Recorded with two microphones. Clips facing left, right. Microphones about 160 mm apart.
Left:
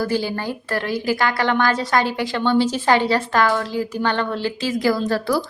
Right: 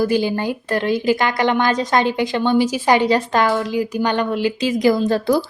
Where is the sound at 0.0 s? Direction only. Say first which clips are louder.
Right 4 dB; 15° right (ahead or behind).